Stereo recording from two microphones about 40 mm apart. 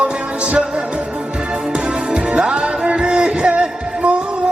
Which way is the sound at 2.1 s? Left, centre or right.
Right.